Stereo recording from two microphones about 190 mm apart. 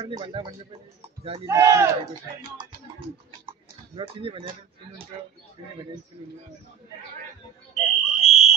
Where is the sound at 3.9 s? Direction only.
30° right (ahead or behind).